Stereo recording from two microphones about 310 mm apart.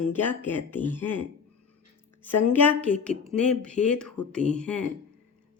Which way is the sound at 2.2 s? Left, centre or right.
Centre.